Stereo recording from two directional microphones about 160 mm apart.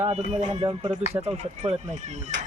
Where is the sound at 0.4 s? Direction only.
35° right (ahead or behind).